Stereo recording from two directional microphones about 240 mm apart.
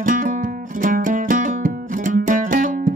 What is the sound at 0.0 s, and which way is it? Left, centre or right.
Music, right.